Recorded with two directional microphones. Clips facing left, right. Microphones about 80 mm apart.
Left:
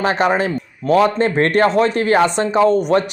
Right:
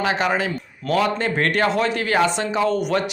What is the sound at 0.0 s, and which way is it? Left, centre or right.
A man's voice, left.